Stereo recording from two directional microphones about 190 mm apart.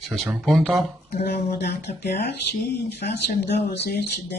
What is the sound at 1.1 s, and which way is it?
Speech, 55° left (ahead or behind).